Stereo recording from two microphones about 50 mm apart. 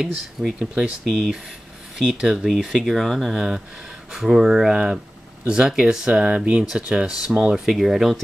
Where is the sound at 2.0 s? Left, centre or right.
Centre.